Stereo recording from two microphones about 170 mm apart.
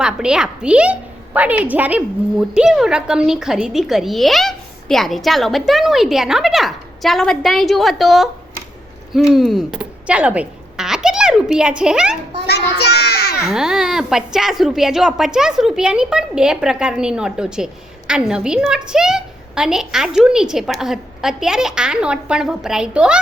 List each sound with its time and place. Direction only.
0.0 s a woman's voice: 5° right (ahead or behind)
9.3 s a child's voice: centre (ahead or behind)
12.5 s child singing: 70° left (ahead or behind)
13.5 s speech: 5° right (ahead or behind)